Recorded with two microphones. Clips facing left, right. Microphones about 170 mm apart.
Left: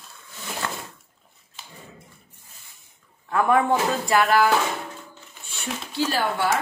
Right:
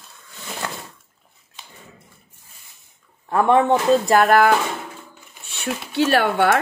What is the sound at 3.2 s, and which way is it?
Speech, 30° right (ahead or behind).